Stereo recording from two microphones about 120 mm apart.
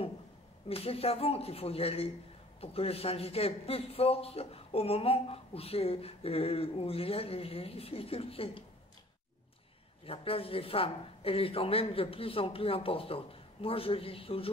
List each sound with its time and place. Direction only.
0.7 s a man's voice: 55° left (ahead or behind)
10.0 s speech: 50° left (ahead or behind)